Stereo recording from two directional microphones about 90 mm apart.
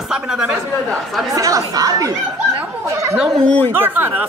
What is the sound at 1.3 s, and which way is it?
Speech, 40° right (ahead or behind).